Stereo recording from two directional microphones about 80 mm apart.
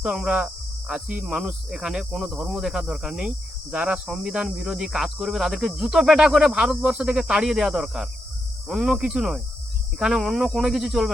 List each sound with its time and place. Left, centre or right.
0.0 s speech: centre